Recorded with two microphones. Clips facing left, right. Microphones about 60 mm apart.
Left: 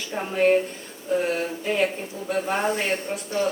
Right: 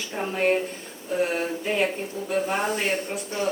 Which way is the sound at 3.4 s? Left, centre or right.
Centre.